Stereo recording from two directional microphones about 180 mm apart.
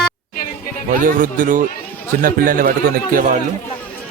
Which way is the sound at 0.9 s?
50° right (ahead or behind).